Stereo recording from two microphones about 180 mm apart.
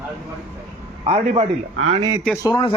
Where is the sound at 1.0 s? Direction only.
35° right (ahead or behind).